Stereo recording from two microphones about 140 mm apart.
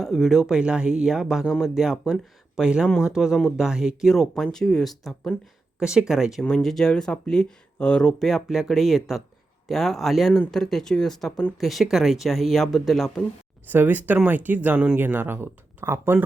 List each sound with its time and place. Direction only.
0.0 s speech: centre (ahead or behind)
13.7 s speech: 15° right (ahead or behind)